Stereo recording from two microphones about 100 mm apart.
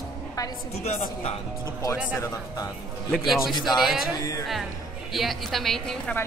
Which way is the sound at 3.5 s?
50° left (ahead or behind).